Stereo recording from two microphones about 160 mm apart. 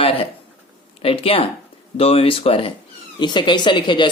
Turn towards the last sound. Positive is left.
turn(degrees=30)  # may be behind; listen again after turning